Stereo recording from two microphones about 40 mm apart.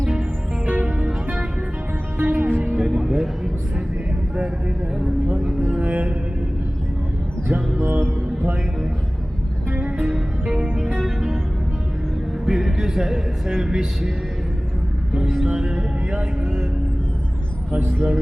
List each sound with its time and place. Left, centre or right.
0.6 s music: right
2.1 s music: right
2.7 s music: centre
5.8 s music: right
7.8 s music: right
9.7 s music: right
10.9 s music: centre
12.5 s speech: centre
15.5 s speech: centre
17.7 s speech: right